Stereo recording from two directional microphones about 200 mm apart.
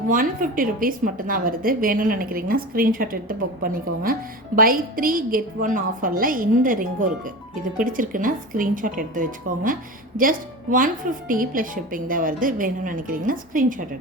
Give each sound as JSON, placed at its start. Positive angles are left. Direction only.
{"t": 0.1, "sound": "a woman's voice", "side_deg": -45}